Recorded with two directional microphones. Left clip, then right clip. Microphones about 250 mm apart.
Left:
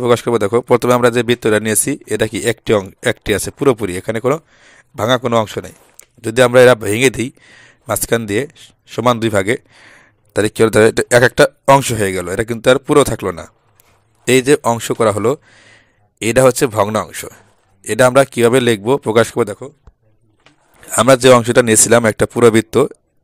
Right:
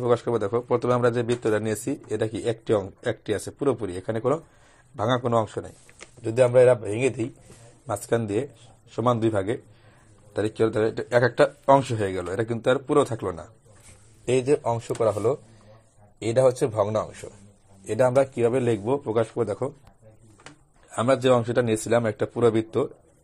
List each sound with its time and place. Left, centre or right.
0.0 s speech: left
20.9 s speech: left